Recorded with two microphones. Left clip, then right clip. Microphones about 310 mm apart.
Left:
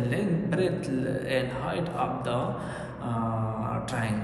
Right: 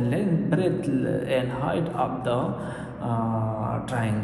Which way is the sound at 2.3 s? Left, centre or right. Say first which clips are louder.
Right 3 dB; centre.